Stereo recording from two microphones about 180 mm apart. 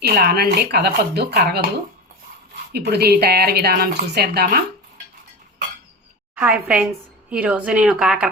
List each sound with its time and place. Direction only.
0.0 s speech: 60° right (ahead or behind)
2.7 s speech: 65° right (ahead or behind)
6.3 s speech: 5° right (ahead or behind)